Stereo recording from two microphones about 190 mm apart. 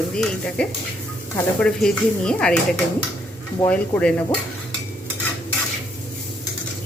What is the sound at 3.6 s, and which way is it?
Speech, 5° left (ahead or behind).